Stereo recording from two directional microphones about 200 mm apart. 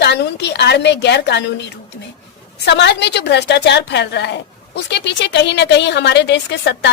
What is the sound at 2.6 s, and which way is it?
A woman's voice, 60° left (ahead or behind).